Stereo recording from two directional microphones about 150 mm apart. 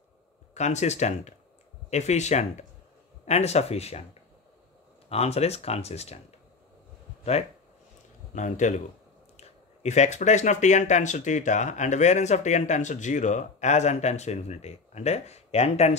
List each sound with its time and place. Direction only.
0.6 s speech: 50° left (ahead or behind)
8.4 s a man's voice: 55° left (ahead or behind)